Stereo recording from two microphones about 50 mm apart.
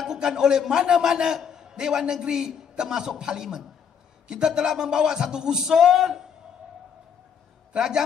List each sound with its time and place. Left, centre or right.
0.1 s a man's voice: centre
7.7 s a man's voice: centre